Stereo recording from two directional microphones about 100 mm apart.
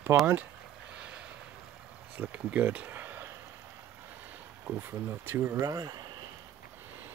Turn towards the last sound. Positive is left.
turn(degrees=-40)  # may be behind; listen again after turning